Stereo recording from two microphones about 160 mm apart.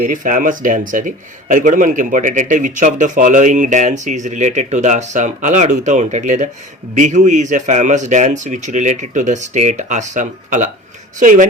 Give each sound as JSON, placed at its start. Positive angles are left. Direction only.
{"t": 0.0, "sound": "speech", "side_deg": -55}